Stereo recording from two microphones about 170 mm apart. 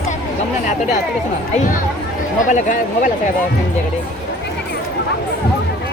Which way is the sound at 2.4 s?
50° left (ahead or behind).